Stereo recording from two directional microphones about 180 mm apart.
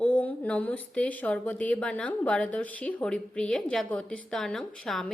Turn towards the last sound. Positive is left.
turn(degrees=0)  # may be behind; listen again after turning